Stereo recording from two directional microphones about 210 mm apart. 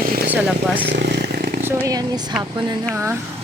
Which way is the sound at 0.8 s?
55° right (ahead or behind).